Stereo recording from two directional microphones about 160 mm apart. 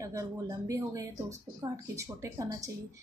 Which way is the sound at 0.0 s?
20° right (ahead or behind).